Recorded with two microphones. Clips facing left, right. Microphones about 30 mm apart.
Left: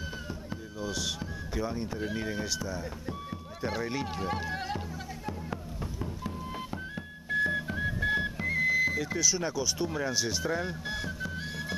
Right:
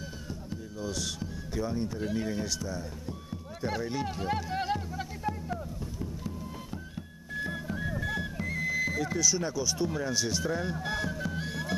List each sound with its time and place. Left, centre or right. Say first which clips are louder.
0.3 s speech: even; centre
4.5 s music: right 3 dB; centre
5.5 s music: right 1 dB; left; by 11.7 s centre